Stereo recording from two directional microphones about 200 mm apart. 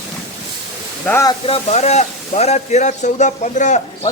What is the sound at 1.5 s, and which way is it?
A man's voice, 35° left (ahead or behind).